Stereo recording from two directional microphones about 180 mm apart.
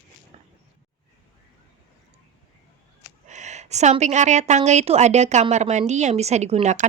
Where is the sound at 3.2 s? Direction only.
40° right (ahead or behind).